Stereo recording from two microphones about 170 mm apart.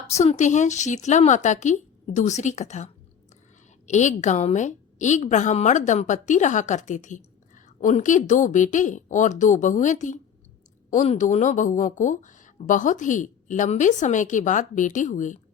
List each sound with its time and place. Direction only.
0.1 s a woman's voice: 40° left (ahead or behind)